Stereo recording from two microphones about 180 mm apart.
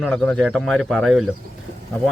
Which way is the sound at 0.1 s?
5° left (ahead or behind).